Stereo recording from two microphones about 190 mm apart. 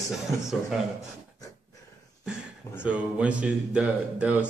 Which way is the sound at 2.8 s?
5° right (ahead or behind).